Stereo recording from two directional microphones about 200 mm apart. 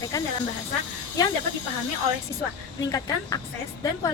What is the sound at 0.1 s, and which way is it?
Speech, 15° left (ahead or behind).